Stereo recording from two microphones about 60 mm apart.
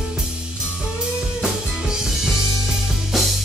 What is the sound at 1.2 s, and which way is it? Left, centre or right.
Drum kit, centre.